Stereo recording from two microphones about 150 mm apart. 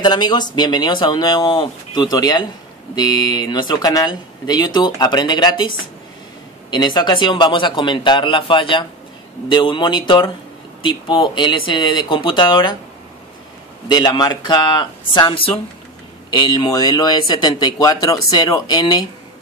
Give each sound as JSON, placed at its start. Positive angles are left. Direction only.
{"t": 0.0, "sound": "a man's voice", "side_deg": 30}
{"t": 13.8, "sound": "speech", "side_deg": 30}